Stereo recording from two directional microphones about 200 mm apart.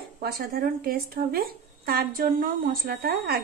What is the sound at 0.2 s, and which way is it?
Speech, 50° right (ahead or behind).